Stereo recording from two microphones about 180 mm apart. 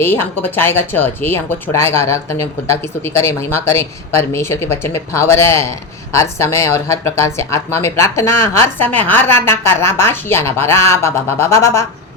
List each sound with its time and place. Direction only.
0.0 s speech: 10° left (ahead or behind)